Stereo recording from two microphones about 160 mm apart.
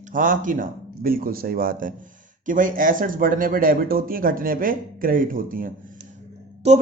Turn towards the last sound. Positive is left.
turn(degrees=-40)  # may be behind; listen again after turning